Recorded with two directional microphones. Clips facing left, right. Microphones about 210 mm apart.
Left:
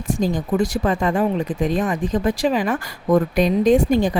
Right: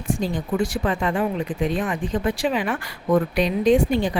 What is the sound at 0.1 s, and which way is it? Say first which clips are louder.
Speech: left 3 dB; 40° left (ahead or behind).